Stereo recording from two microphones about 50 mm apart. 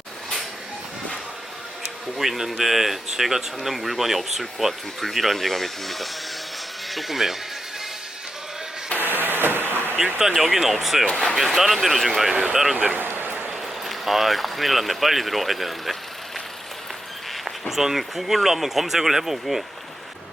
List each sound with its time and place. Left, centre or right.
2.1 s speech: centre
9.0 s vehicle: right
10.2 s speech: centre
11.1 s speech: centre
11.3 s speech: centre
12.7 s speech: right
13.0 s a sound: right
13.5 s speech: centre
17.4 s speech: centre